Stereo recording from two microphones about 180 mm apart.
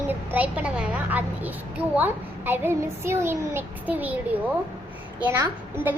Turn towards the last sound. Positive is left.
turn(degrees=-10)  # may be behind; listen again after turning